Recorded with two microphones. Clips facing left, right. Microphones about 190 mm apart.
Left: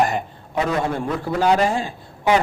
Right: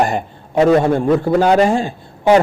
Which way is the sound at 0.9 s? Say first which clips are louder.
Right 10 dB; 50° right (ahead or behind).